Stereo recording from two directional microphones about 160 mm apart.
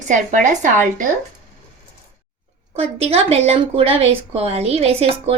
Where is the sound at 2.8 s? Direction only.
40° right (ahead or behind).